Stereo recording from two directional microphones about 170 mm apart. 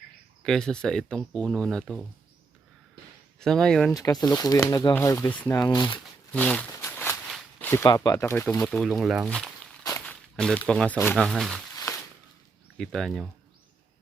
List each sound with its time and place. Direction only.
0.4 s speech: 5° left (ahead or behind)
3.4 s speech: 5° left (ahead or behind)
3.9 s speech: 20° left (ahead or behind)
5.5 s speech: 25° left (ahead or behind)
6.3 s speech: 10° left (ahead or behind)
6.7 s a sound: 15° left (ahead or behind)
7.6 s zipper: 15° left (ahead or behind)
7.9 s speech: 20° left (ahead or behind); by 11.6 s centre (ahead or behind)
11.9 s a sound: 20° left (ahead or behind)
12.7 s speech: 5° left (ahead or behind)